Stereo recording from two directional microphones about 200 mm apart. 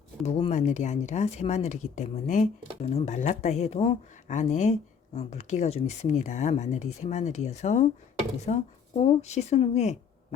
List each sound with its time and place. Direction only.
0.3 s speech: 30° left (ahead or behind)